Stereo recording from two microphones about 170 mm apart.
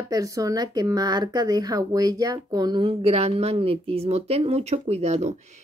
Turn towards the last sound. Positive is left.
turn(degrees=-40)  # may be behind; listen again after turning